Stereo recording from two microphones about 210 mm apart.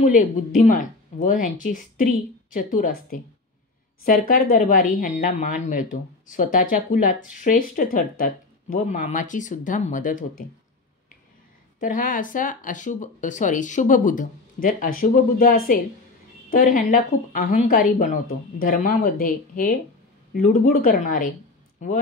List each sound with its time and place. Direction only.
0.0 s speech: 35° left (ahead or behind)
11.8 s speech: 40° left (ahead or behind)